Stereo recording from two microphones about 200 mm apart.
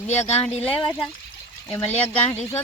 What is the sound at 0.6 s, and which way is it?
Speech, 5° left (ahead or behind).